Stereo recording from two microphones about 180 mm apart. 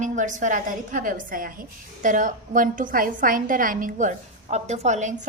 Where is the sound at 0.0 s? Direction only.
45° right (ahead or behind).